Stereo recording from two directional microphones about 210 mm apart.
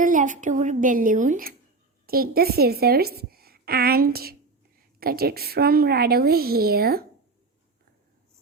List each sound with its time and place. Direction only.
0.0 s a woman's voice: 40° right (ahead or behind)